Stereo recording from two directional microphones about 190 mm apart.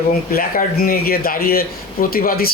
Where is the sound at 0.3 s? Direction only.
50° left (ahead or behind).